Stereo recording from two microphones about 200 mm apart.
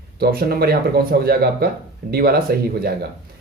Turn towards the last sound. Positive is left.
turn(degrees=-50)  # may be behind; listen again after turning